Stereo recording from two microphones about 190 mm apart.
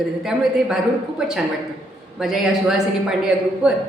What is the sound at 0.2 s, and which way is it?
Speech, centre (ahead or behind).